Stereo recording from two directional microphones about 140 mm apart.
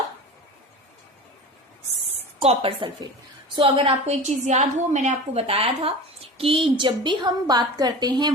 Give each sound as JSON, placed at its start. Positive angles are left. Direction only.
{"t": 2.4, "sound": "a woman's voice", "side_deg": -45}